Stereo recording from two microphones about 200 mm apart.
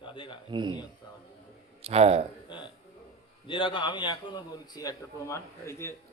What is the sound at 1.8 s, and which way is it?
Speech, 30° right (ahead or behind).